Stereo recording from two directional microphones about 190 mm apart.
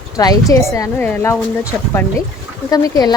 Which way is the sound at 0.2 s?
20° left (ahead or behind).